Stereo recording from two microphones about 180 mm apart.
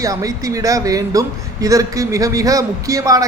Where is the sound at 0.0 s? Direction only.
20° right (ahead or behind).